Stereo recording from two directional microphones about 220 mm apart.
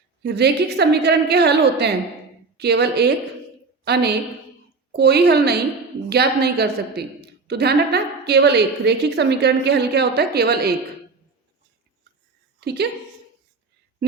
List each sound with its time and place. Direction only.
0.2 s a woman's voice: 50° right (ahead or behind)
12.5 s a woman's voice: 50° right (ahead or behind)